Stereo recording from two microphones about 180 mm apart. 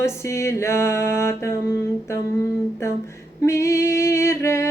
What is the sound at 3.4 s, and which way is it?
Female singing, 15° left (ahead or behind).